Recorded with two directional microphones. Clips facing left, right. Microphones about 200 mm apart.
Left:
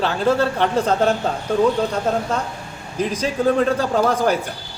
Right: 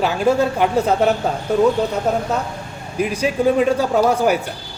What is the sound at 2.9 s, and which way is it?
A man's voice, 10° right (ahead or behind).